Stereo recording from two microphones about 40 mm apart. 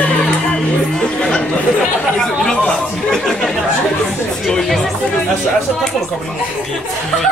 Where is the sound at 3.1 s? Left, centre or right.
Centre.